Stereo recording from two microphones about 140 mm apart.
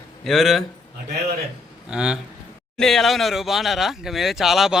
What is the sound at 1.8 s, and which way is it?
Speech, 5° right (ahead or behind).